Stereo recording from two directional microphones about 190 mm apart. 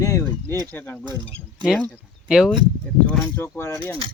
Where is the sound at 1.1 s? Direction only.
20° right (ahead or behind).